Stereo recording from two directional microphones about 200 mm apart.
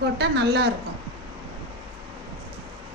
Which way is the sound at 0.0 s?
60° right (ahead or behind).